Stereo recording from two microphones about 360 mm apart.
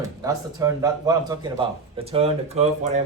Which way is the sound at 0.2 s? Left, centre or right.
Centre.